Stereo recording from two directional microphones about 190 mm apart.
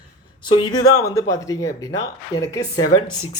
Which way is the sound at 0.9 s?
15° left (ahead or behind).